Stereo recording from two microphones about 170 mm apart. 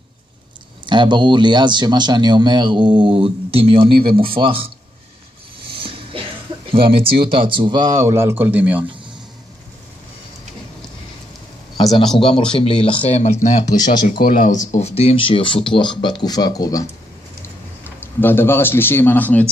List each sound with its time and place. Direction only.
0.8 s speech: 25° right (ahead or behind)
5.7 s a sound: 30° right (ahead or behind)
6.7 s speech: 30° right (ahead or behind); by 8.8 s 10° right (ahead or behind)
11.8 s speech: centre (ahead or behind)
12.2 s speech: 30° left (ahead or behind)
17.8 s speech: 10° left (ahead or behind)